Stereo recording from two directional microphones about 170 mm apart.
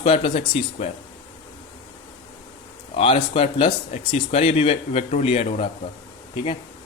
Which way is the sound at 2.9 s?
35° left (ahead or behind).